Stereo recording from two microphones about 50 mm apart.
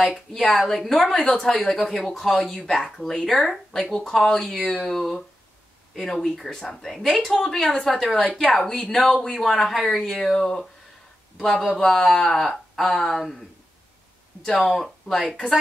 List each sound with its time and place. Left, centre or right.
0.0 s a woman's voice: centre
8.2 s a woman's voice: centre
14.4 s speech: centre